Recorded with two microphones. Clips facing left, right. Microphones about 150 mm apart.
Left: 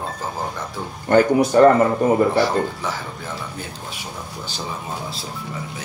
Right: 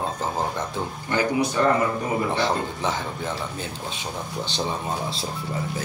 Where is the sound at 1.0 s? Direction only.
50° left (ahead or behind).